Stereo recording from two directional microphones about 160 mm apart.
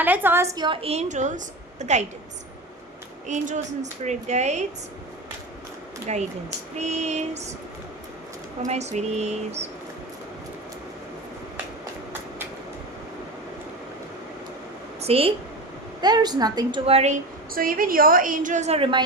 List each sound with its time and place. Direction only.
0.0 s a woman's voice: 10° right (ahead or behind); by 2.0 s 45° right (ahead or behind)
3.2 s speech: 50° right (ahead or behind)
6.1 s speech: 45° right (ahead or behind)
8.6 s speech: 45° right (ahead or behind)
15.0 s a woman's voice: 35° right (ahead or behind)
16.0 s a woman's voice: 25° right (ahead or behind)
16.8 s speech: 40° right (ahead or behind)
17.5 s a woman's voice: 65° right (ahead or behind); by 19.0 s 30° right (ahead or behind)